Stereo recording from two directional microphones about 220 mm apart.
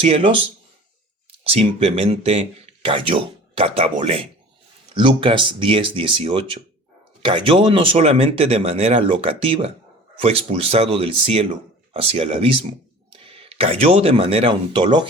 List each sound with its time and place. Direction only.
0.0 s speech: 25° right (ahead or behind)
1.5 s speech: 25° right (ahead or behind)